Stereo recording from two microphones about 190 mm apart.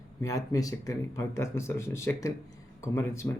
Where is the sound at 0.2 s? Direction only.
15° left (ahead or behind).